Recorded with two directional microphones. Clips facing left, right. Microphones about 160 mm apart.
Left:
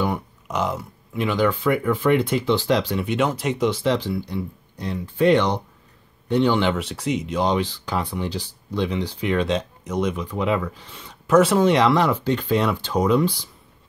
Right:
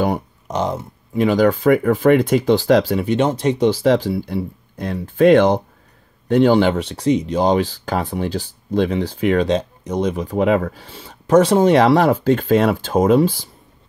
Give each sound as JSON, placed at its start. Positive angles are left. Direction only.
{"t": 0.0, "sound": "speech", "side_deg": -35}
{"t": 3.8, "sound": "speech", "side_deg": -45}
{"t": 10.9, "sound": "speech", "side_deg": -35}
{"t": 11.6, "sound": "speech", "side_deg": -45}